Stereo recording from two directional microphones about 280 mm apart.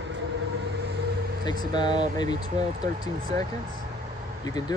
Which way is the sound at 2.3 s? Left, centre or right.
Right.